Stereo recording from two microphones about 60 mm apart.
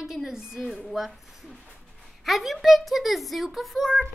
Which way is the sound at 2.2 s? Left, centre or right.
Centre.